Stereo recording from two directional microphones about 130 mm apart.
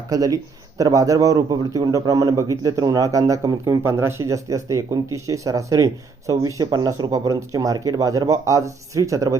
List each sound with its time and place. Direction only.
0.1 s a man's voice: 25° right (ahead or behind)